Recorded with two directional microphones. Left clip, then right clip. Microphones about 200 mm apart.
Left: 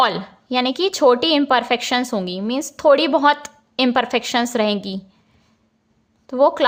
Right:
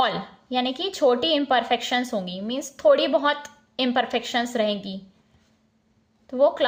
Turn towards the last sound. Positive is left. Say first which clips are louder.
# left 4 dB
turn(degrees=35)  # may be behind; listen again after turning